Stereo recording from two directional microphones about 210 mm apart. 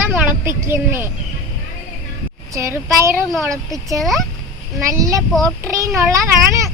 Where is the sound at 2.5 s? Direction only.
15° right (ahead or behind).